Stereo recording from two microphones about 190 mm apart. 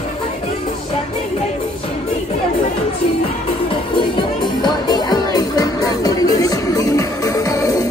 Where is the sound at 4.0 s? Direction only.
25° left (ahead or behind).